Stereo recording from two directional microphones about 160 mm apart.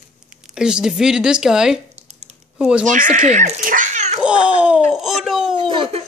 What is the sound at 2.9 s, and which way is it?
Speech, 55° right (ahead or behind).